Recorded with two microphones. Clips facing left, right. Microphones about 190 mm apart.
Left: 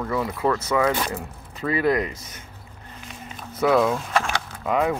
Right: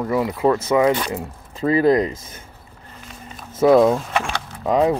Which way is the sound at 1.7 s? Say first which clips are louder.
Right 6 dB; 35° right (ahead or behind).